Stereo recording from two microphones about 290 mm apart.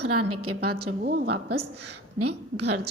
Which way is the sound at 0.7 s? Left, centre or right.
Right.